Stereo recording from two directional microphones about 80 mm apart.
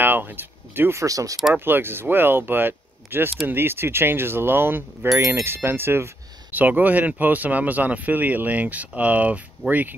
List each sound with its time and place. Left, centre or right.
0.0 s a sound: right
0.9 s speech: right
1.5 s speech: right